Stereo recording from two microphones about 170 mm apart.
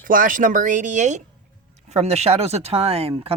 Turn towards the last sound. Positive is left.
turn(degrees=-35)  # may be behind; listen again after turning